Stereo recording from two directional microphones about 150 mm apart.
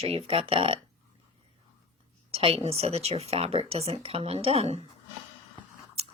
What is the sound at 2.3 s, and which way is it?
Speech, 40° right (ahead or behind).